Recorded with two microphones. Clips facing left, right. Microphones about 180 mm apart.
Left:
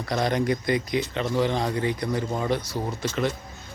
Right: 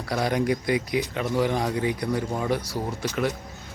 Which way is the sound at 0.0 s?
10° right (ahead or behind).